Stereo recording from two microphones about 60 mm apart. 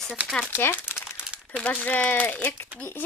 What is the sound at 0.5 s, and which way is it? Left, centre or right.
Speech, left.